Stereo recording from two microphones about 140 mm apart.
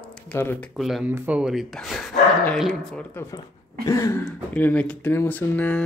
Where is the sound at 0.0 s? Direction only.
5° left (ahead or behind).